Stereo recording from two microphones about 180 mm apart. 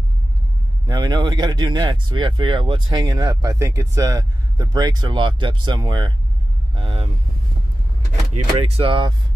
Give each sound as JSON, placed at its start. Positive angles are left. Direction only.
{"t": 0.8, "sound": "speech", "side_deg": -25}
{"t": 6.7, "sound": "vehicle", "side_deg": -30}
{"t": 8.4, "sound": "speech", "side_deg": -35}